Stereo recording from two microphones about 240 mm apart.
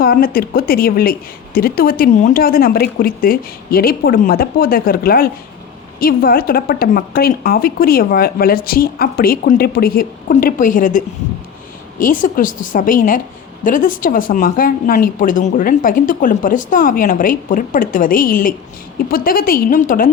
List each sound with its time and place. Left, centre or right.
0.0 s a woman's voice: left